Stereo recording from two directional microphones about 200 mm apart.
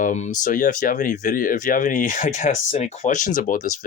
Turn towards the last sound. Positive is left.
turn(degrees=40)  # may be behind; listen again after turning